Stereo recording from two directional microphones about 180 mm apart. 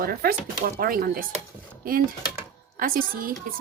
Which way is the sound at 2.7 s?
50° right (ahead or behind).